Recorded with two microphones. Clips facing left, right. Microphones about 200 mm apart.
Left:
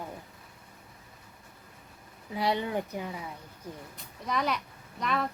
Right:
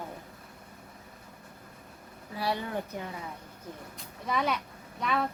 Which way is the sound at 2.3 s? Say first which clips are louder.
Left 3 dB; 20° left (ahead or behind).